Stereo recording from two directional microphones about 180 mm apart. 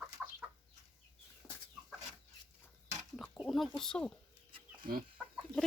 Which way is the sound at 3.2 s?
Centre (ahead or behind).